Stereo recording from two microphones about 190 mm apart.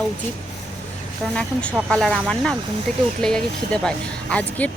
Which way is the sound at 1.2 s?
5° left (ahead or behind).